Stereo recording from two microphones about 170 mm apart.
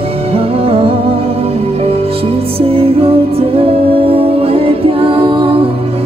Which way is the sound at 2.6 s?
35° right (ahead or behind).